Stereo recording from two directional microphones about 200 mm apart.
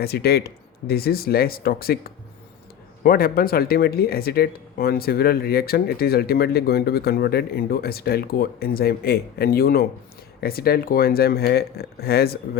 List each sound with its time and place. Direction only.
0.0 s speech: 50° left (ahead or behind)